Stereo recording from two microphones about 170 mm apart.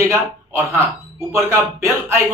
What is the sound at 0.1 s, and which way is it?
A man's voice, 15° right (ahead or behind).